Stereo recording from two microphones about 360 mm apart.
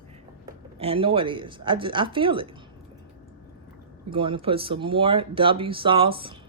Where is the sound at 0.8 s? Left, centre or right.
Centre.